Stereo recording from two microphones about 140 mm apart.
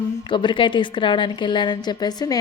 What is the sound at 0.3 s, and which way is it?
A woman's voice, 35° left (ahead or behind).